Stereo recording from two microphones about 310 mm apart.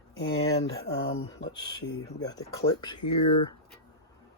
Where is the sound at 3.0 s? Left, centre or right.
Left.